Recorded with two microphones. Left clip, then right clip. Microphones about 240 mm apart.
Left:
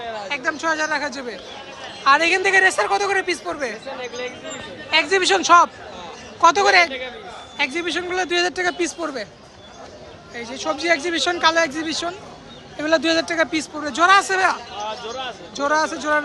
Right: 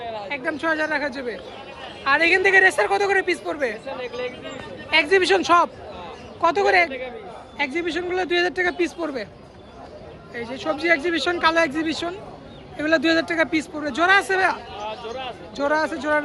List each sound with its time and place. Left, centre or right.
0.3 s a man's voice: centre
3.8 s speech: left
4.9 s a man's voice: centre
10.3 s speech: centre
14.8 s a sound: left
15.5 s speech: centre